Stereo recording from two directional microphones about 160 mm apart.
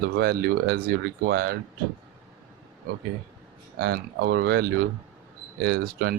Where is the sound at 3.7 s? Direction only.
75° right (ahead or behind).